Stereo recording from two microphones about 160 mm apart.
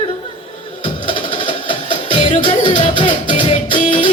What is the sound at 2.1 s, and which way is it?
Music, 30° left (ahead or behind).